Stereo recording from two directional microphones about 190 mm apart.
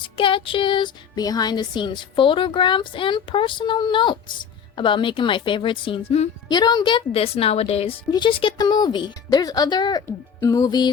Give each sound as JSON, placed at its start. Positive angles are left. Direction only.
{"t": 0.0, "sound": "speech", "side_deg": 25}